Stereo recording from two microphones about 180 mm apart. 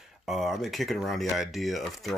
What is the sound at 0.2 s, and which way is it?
Speech, centre (ahead or behind).